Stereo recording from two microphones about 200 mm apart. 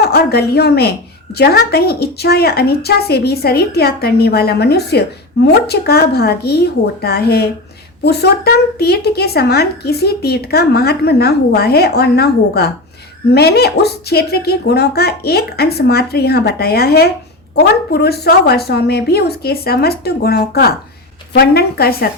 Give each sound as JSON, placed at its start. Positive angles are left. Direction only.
{"t": 0.0, "sound": "speech", "side_deg": 55}